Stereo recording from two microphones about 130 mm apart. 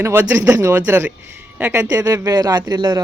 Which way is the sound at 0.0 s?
20° right (ahead or behind).